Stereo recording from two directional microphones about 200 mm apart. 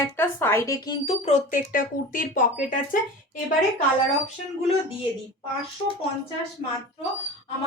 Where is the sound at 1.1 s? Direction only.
35° left (ahead or behind).